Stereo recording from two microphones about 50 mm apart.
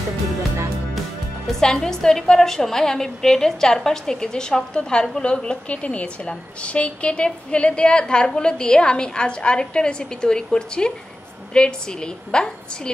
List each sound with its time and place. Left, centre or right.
1.5 s a woman's voice: centre